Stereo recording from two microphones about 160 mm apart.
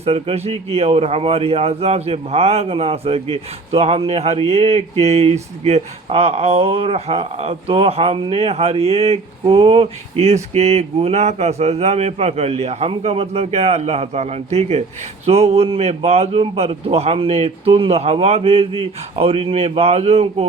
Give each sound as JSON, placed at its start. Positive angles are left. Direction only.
{"t": 0.0, "sound": "a man's voice", "side_deg": -40}